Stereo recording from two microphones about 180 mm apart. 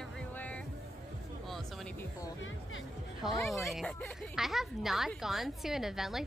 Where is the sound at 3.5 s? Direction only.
Centre (ahead or behind).